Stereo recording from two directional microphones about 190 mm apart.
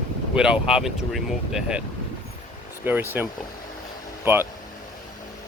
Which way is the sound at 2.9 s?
10° right (ahead or behind).